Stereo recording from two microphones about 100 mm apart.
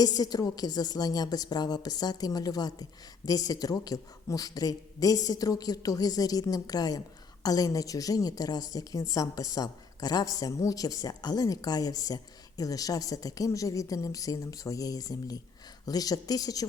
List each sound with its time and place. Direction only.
0.0 s a woman's voice: 40° left (ahead or behind)